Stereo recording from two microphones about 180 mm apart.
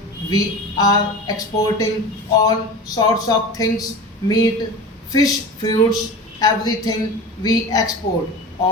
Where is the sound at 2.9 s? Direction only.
20° left (ahead or behind).